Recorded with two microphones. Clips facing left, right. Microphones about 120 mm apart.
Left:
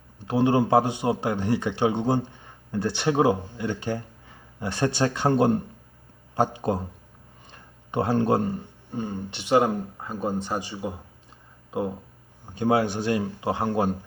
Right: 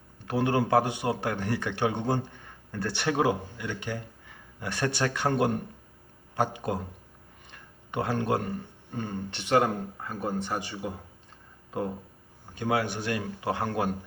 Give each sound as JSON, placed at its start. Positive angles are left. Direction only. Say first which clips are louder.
{"t": 0.3, "sound": "speech", "louder": "left 5 dB", "side_deg": 25}
{"t": 7.5, "sound": "a sound", "louder": "left 5 dB", "side_deg": 30}
{"t": 8.9, "sound": "speech", "louder": "left 3 dB", "side_deg": 10}
{"t": 12.5, "sound": "speech", "louder": "left 6 dB", "side_deg": 30}